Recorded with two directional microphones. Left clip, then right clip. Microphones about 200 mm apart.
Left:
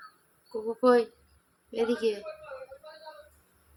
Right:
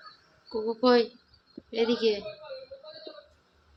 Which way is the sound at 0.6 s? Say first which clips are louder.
Even; 5° right (ahead or behind).